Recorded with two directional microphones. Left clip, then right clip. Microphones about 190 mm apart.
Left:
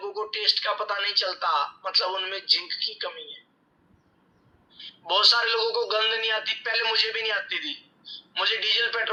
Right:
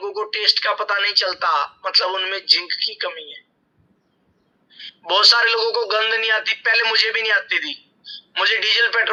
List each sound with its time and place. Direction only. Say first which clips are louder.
0.2 s a man's voice: right 6 dB; 30° right (ahead or behind)
4.8 s a man's voice: right 6 dB; 30° right (ahead or behind)